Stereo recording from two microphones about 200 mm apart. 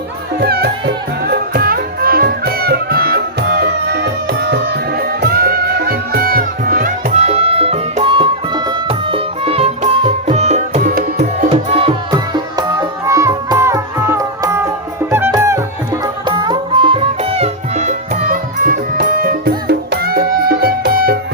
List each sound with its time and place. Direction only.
0.3 s speech: 55° right (ahead or behind)
1.3 s music: 50° right (ahead or behind)